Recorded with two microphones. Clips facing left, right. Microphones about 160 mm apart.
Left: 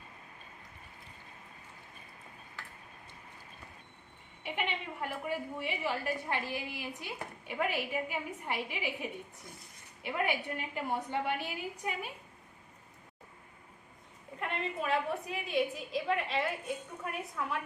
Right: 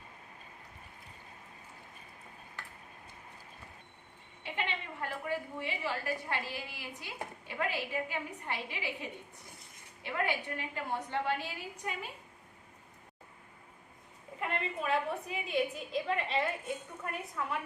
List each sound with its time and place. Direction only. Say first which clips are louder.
4.4 s a woman's voice: left 1 dB; 15° left (ahead or behind)
14.3 s a woman's voice: even; centre (ahead or behind)